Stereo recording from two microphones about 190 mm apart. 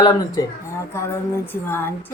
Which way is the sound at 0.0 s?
20° left (ahead or behind).